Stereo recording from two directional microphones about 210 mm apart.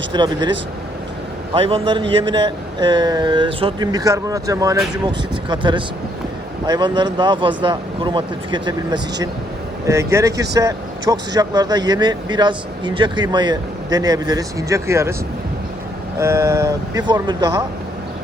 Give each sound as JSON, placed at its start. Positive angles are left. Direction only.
{"t": 0.1, "sound": "speech", "side_deg": -20}
{"t": 1.5, "sound": "speech", "side_deg": -25}
{"t": 16.1, "sound": "speech", "side_deg": -15}